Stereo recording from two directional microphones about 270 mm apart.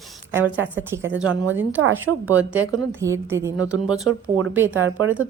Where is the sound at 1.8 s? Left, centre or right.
Right.